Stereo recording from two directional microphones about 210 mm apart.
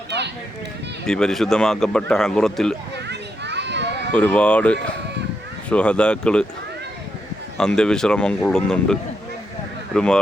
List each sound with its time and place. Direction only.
1.0 s speech: 5° left (ahead or behind)
3.1 s children playing: 55° right (ahead or behind)
4.1 s speech: 5° left (ahead or behind)
7.6 s speech: 5° left (ahead or behind)